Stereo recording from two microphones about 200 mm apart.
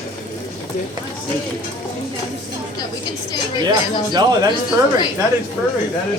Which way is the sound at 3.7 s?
20° right (ahead or behind).